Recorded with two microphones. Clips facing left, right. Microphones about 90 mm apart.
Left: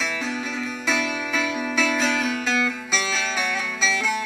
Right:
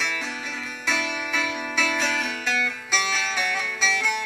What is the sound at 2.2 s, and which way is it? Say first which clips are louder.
Music: left 3 dB; 35° left (ahead or behind).